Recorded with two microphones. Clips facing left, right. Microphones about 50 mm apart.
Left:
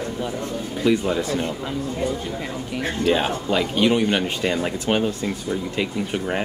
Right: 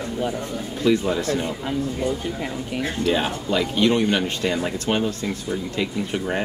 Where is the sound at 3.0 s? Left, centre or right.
Centre.